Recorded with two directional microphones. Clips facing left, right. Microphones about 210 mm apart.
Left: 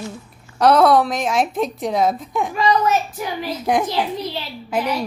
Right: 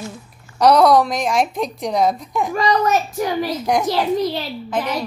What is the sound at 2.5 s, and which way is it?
Speech, 40° right (ahead or behind).